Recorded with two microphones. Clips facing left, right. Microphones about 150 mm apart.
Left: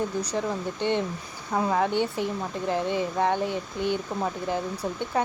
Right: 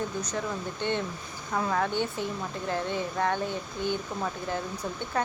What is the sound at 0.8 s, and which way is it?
Speech, 30° left (ahead or behind).